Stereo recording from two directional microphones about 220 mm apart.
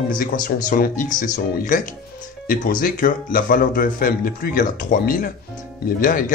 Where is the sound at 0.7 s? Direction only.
40° left (ahead or behind).